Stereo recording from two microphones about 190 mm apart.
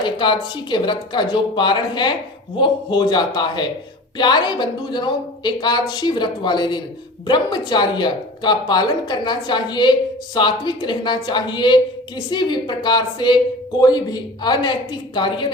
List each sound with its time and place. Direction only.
0.0 s a woman's voice: 25° left (ahead or behind)